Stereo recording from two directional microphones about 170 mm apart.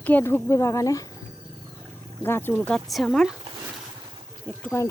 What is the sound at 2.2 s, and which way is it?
Speech, 10° left (ahead or behind).